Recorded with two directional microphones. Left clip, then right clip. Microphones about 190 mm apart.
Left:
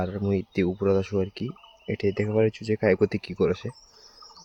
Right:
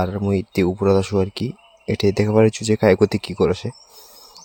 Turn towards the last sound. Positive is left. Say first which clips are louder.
# right 6 dB
turn(degrees=-10)  # may be behind; listen again after turning